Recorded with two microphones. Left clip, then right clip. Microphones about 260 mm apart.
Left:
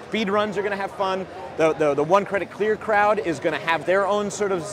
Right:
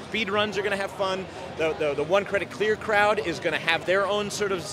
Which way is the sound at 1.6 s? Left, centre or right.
Left.